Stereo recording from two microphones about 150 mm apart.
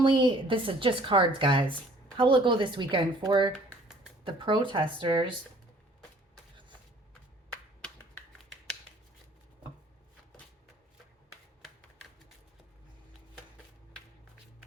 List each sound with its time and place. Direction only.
0.0 s a woman's voice: 35° right (ahead or behind)